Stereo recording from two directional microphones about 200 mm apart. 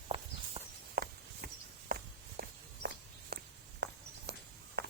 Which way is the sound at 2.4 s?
55° right (ahead or behind).